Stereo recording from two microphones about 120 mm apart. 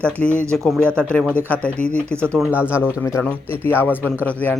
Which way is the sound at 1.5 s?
10° left (ahead or behind).